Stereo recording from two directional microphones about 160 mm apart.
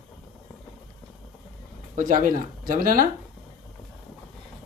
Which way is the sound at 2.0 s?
55° right (ahead or behind).